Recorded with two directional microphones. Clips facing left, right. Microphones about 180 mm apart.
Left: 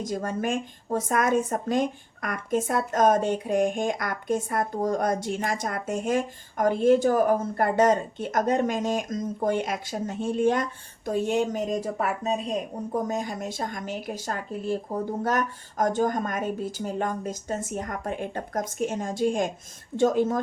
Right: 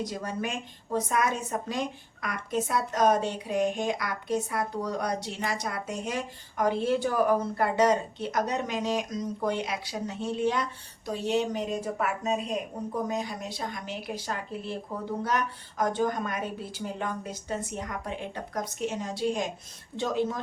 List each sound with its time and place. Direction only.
0.0 s speech: 45° left (ahead or behind)
12.9 s speech: 45° left (ahead or behind)